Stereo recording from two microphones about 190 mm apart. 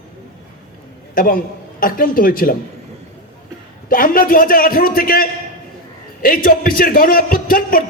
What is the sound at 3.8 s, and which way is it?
A man's voice, 50° left (ahead or behind).